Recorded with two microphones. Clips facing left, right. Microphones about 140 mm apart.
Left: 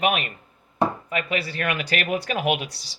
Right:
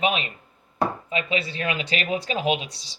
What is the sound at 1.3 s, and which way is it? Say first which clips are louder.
Speech: even; 25° right (ahead or behind).